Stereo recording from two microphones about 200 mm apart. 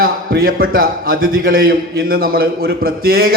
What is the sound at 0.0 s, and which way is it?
A man's voice, 45° right (ahead or behind).